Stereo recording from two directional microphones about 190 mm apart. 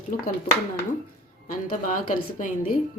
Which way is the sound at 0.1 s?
45° left (ahead or behind).